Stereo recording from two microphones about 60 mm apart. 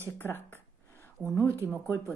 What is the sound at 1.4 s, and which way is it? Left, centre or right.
Speech, right.